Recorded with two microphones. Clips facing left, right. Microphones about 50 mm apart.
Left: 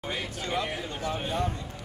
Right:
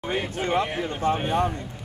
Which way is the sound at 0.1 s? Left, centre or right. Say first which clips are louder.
Right 7 dB; right.